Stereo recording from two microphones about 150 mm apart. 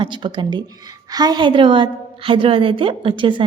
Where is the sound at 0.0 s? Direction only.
30° right (ahead or behind).